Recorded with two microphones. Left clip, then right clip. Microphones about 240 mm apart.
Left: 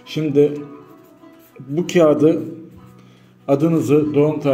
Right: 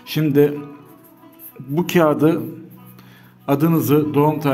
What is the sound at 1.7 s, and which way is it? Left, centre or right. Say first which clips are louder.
Speech: left 2 dB; right.